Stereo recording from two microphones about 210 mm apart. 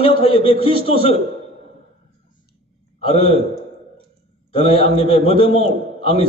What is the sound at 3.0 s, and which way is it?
Speech, 30° left (ahead or behind).